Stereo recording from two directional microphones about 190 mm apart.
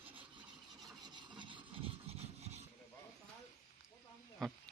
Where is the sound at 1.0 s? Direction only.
25° right (ahead or behind).